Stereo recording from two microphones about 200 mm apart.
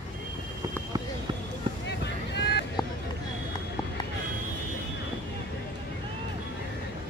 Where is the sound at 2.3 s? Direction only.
55° left (ahead or behind).